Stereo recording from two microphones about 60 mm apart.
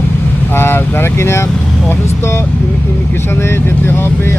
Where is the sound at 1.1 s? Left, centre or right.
Left.